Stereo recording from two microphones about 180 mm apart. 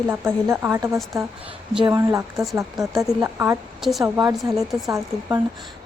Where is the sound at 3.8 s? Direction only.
Centre (ahead or behind).